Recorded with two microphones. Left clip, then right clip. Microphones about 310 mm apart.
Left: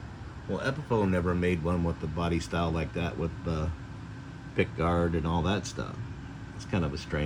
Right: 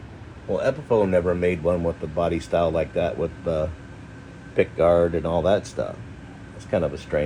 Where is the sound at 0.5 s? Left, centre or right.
Right.